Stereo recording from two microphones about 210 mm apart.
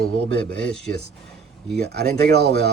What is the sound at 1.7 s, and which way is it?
Speech, 50° right (ahead or behind).